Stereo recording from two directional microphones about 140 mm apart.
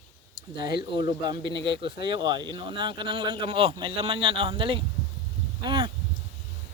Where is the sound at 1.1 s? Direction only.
30° right (ahead or behind).